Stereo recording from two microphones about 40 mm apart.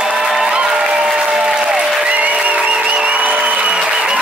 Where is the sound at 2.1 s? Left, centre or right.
Right.